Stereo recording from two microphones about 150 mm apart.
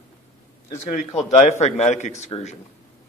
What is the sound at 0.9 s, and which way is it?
Speech, 50° left (ahead or behind).